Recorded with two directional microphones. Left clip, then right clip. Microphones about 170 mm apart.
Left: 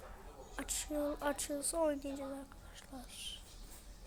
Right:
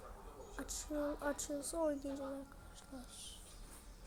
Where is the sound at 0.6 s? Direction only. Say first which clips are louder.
Left 3 dB; 10° right (ahead or behind).